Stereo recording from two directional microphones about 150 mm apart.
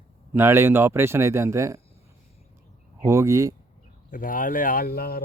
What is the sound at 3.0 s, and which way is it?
Speech, 20° right (ahead or behind).